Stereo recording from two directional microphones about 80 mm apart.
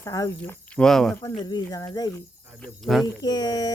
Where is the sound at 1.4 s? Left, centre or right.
Left.